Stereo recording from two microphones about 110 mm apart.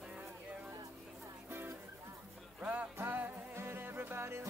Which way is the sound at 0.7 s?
30° right (ahead or behind).